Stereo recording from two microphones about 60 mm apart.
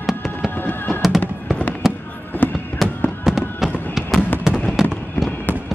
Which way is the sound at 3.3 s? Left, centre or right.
Centre.